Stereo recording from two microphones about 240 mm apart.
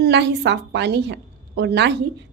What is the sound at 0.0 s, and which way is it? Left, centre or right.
A woman's voice, right.